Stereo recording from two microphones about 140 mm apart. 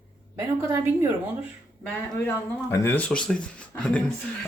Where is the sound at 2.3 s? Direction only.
20° left (ahead or behind).